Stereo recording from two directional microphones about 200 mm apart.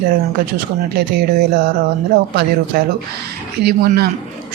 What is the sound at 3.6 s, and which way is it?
Speech, 55° right (ahead or behind).